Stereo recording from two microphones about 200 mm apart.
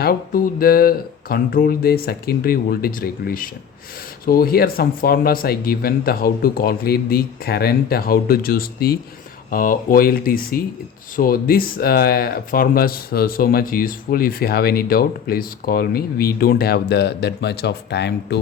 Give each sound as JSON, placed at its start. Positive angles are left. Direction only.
{"t": 0.0, "sound": "speech", "side_deg": 50}